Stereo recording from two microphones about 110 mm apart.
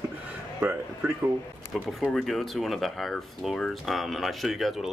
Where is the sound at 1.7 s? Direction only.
Centre (ahead or behind).